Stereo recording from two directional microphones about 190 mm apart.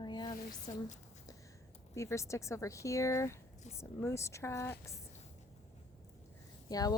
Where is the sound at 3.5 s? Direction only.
40° left (ahead or behind).